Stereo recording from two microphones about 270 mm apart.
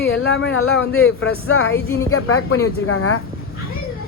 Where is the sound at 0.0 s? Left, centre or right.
Left.